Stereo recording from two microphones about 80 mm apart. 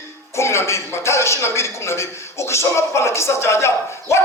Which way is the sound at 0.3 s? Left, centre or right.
Left.